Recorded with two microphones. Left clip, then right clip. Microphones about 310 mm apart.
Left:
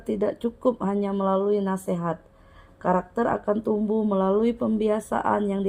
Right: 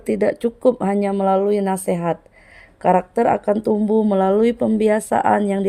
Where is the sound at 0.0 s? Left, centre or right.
Right.